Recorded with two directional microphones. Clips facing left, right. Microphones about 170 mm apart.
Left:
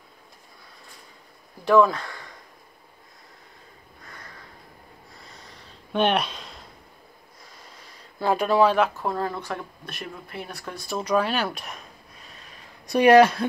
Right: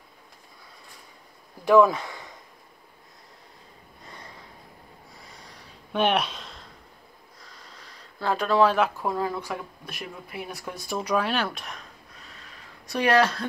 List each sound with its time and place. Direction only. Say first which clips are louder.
1.6 s speech: right 1 dB; 15° right (ahead or behind)
4.0 s sniff: right 1 dB; 25° right (ahead or behind)
5.9 s a sound: left 1 dB; 5° right (ahead or behind)
8.2 s speech: left 2 dB; 15° left (ahead or behind)
8.6 s speech: left 2 dB; 5° right (ahead or behind)
11.1 s speech: left 2 dB; centre (ahead or behind)
12.3 s a sound: left 1 dB; 15° left (ahead or behind)